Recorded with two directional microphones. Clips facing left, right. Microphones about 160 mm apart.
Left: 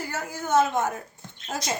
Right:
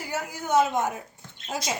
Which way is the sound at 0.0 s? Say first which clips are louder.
Even; 15° right (ahead or behind).